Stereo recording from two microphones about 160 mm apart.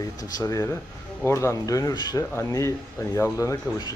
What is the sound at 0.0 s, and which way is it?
Speech, 20° left (ahead or behind).